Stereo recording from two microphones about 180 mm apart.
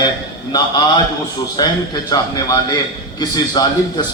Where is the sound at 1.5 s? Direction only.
20° left (ahead or behind).